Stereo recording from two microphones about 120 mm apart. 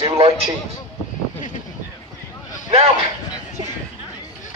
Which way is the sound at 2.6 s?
55° right (ahead or behind).